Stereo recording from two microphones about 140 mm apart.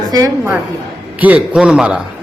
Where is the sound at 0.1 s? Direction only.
25° right (ahead or behind).